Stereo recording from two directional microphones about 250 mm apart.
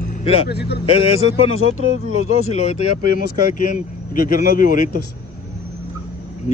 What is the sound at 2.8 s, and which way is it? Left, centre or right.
Speech, left.